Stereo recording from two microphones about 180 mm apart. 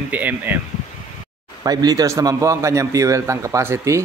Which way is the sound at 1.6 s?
20° right (ahead or behind).